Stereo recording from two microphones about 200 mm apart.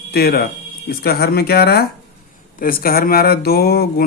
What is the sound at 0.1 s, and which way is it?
Speech, 50° left (ahead or behind).